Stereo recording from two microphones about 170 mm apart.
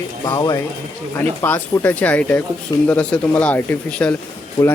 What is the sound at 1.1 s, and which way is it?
Speech, 10° left (ahead or behind).